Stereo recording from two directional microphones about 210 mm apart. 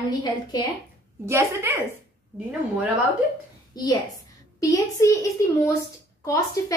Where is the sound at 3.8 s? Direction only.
20° left (ahead or behind).